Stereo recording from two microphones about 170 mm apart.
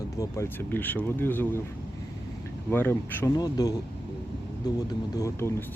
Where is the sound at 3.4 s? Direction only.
25° left (ahead or behind).